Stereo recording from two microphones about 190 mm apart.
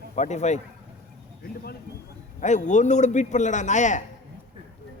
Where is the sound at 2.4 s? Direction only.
40° left (ahead or behind).